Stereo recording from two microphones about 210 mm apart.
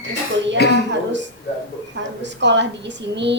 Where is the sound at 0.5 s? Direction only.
50° left (ahead or behind).